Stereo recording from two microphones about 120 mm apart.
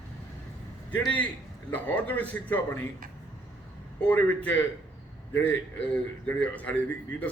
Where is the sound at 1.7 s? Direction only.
15° left (ahead or behind).